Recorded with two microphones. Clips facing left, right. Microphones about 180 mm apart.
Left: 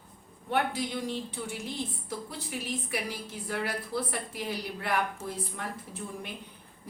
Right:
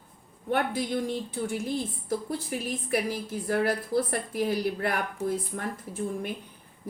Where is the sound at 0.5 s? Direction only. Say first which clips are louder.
Right 3 dB; 50° right (ahead or behind).